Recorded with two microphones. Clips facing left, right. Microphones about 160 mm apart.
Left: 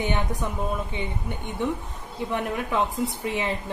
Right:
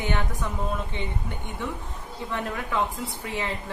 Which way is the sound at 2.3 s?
20° left (ahead or behind).